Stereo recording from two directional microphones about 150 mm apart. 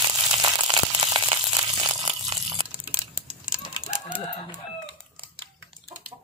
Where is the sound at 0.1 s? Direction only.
25° right (ahead or behind).